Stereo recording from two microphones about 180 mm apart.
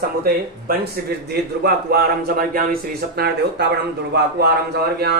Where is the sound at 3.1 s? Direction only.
65° right (ahead or behind).